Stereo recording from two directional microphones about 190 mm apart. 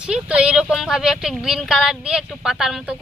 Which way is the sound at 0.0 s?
5° right (ahead or behind).